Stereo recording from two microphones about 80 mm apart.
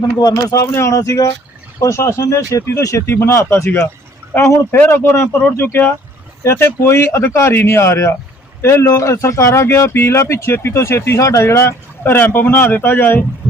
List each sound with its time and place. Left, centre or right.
0.2 s speech: left
0.7 s speech: left